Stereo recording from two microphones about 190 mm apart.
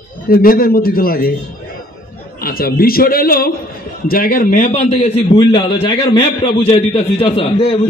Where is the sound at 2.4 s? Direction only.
50° left (ahead or behind).